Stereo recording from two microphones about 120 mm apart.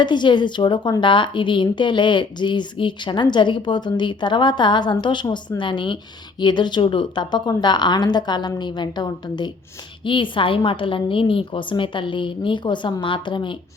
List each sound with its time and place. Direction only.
0.0 s a woman's voice: 40° left (ahead or behind)